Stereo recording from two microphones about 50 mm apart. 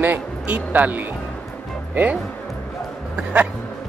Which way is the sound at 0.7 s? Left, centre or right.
Right.